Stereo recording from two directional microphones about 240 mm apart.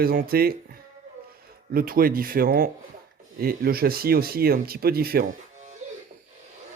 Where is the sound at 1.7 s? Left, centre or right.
Right.